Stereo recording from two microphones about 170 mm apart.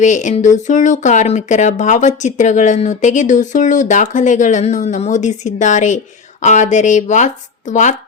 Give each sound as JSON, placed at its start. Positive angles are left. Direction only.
{"t": 0.0, "sound": "speech", "side_deg": 45}